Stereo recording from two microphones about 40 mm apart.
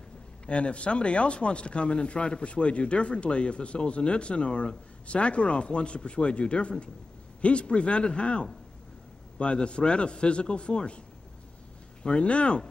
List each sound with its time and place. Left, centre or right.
0.5 s speech: left
12.0 s speech: left